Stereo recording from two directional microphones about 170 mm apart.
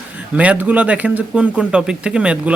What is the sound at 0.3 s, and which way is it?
Speech, 10° right (ahead or behind).